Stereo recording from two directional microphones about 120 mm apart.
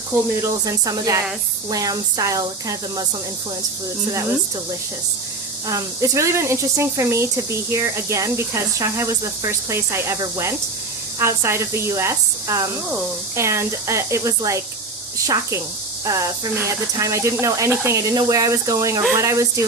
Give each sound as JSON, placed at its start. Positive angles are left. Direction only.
{"t": 0.4, "sound": "speech", "side_deg": -30}
{"t": 5.6, "sound": "speech", "side_deg": -25}
{"t": 11.2, "sound": "speech", "side_deg": -20}